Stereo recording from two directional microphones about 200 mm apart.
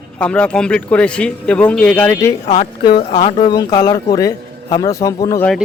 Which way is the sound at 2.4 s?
25° left (ahead or behind).